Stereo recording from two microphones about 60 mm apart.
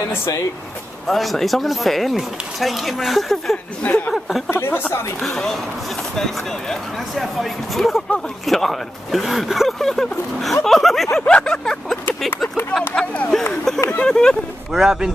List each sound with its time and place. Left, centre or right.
1.0 s speech: centre
3.8 s speech: left
4.5 s a woman's voice: left
5.2 s speech: centre
11.1 s vehicle: centre
12.9 s speech: left
13.3 s vehicle: centre
14.7 s speech: centre